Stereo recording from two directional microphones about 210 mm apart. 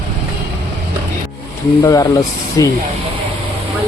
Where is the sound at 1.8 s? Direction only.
15° left (ahead or behind).